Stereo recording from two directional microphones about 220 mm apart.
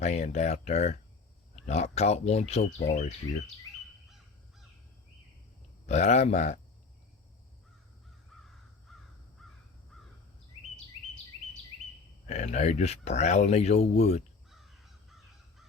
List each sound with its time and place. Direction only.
0.0 s speech: 30° left (ahead or behind)
5.8 s speech: 30° left (ahead or behind)
8.3 s crow: centre (ahead or behind)
9.9 s bird: centre (ahead or behind)
10.8 s bird vocalization: 5° left (ahead or behind)
12.3 s speech: 30° left (ahead or behind)
14.5 s crow: centre (ahead or behind)